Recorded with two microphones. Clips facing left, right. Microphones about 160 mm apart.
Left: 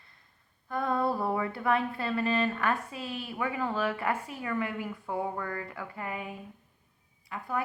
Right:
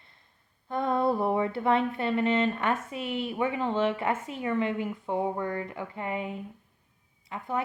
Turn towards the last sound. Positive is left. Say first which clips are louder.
# right 2 dB
turn(degrees=-20)  # may be behind; listen again after turning